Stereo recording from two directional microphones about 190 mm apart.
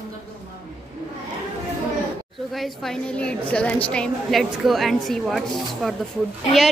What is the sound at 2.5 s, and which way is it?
Speech, centre (ahead or behind).